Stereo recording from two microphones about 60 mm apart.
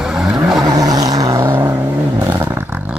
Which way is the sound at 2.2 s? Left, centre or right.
Right.